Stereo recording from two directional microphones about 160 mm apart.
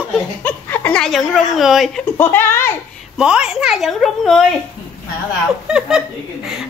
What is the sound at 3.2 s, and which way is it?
A woman's voice, 5° right (ahead or behind).